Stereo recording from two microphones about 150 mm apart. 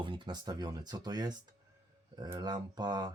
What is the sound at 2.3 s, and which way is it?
Speech, 25° right (ahead or behind).